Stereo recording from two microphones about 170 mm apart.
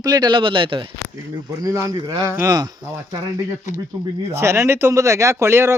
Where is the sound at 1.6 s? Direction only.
20° right (ahead or behind).